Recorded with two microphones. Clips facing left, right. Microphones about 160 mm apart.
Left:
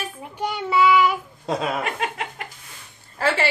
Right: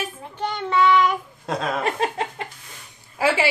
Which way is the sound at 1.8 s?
35° right (ahead or behind).